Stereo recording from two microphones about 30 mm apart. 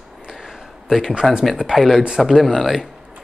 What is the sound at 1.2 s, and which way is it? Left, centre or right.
Speech, centre.